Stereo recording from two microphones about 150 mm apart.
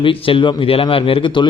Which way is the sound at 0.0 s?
35° left (ahead or behind).